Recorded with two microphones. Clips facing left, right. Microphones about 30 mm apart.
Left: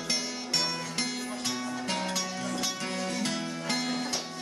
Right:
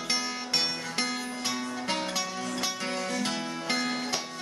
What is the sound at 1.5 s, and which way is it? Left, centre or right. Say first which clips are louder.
Music: right 1 dB; centre.